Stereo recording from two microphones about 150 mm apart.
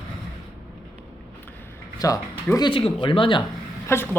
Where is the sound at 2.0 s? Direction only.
25° left (ahead or behind).